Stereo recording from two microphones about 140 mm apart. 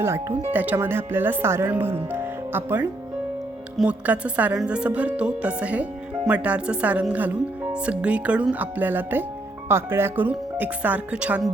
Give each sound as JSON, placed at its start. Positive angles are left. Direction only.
{"t": 0.0, "sound": "a woman's voice", "side_deg": -20}